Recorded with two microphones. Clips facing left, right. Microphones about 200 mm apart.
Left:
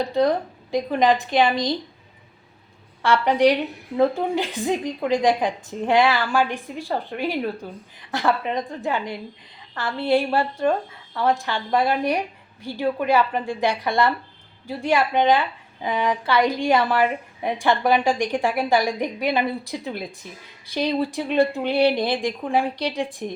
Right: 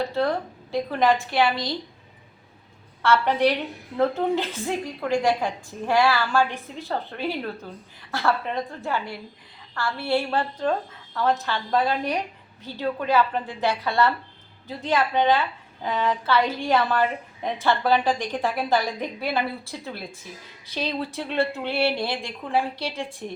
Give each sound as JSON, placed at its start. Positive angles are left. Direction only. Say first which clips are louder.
{"t": 0.0, "sound": "a woman's voice", "louder": "left 4 dB", "side_deg": 15}
{"t": 3.0, "sound": "a woman's voice", "louder": "left 3 dB", "side_deg": 15}